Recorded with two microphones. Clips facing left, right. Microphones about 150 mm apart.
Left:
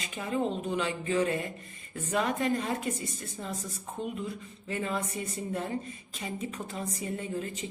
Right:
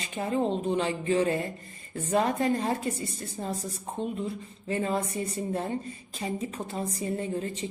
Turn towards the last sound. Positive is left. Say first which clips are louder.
# right 4 dB
turn(degrees=-30)  # may be behind; listen again after turning